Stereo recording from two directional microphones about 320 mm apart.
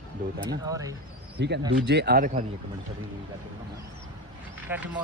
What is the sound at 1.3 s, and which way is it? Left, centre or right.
Speech, right.